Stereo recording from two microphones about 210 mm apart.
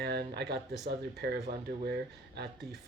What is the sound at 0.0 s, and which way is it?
Speech, 50° right (ahead or behind).